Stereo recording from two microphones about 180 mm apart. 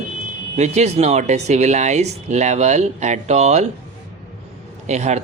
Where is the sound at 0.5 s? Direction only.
40° right (ahead or behind).